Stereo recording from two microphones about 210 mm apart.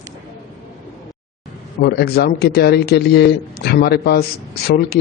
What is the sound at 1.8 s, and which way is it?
A man's voice, 50° left (ahead or behind).